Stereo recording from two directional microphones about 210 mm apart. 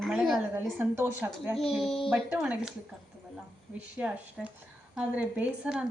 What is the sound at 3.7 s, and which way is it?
A woman's voice, 5° right (ahead or behind).